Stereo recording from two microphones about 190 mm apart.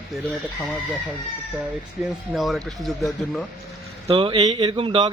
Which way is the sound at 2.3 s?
Centre (ahead or behind).